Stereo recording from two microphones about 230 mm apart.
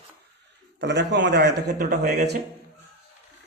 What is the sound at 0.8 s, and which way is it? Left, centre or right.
A man's voice, right.